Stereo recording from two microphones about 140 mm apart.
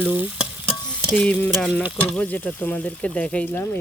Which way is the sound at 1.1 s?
10° left (ahead or behind).